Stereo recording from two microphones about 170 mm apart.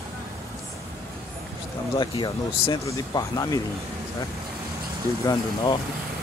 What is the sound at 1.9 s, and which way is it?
Speech, 30° left (ahead or behind).